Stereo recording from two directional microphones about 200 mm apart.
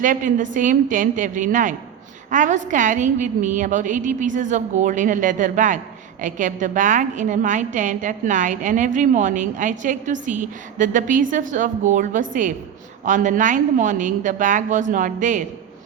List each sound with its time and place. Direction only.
0.0 s a woman's voice: 40° right (ahead or behind)